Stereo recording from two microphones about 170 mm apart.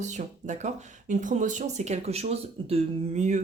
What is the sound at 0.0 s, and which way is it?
Speech, 45° right (ahead or behind).